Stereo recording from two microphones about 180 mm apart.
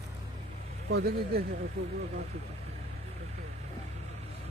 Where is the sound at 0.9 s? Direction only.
60° right (ahead or behind).